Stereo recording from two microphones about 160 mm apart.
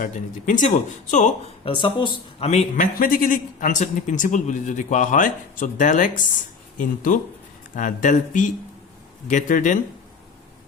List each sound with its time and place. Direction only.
0.0 s speech: 50° left (ahead or behind)
1.6 s speech: 30° left (ahead or behind); by 9.7 s 50° left (ahead or behind)